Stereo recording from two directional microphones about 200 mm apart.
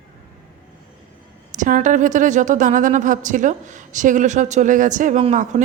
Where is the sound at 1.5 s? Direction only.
40° right (ahead or behind).